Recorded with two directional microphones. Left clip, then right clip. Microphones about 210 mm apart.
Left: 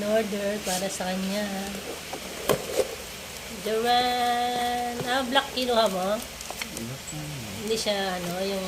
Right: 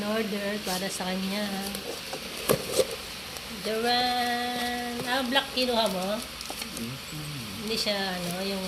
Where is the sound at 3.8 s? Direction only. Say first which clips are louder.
Left 3 dB; 5° right (ahead or behind).